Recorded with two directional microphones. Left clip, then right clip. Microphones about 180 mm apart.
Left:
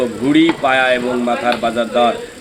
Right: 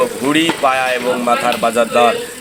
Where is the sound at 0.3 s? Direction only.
10° right (ahead or behind).